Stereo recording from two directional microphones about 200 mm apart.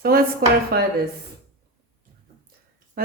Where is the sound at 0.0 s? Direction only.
50° right (ahead or behind).